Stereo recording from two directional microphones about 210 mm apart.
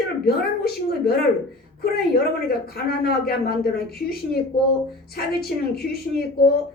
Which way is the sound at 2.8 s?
45° left (ahead or behind).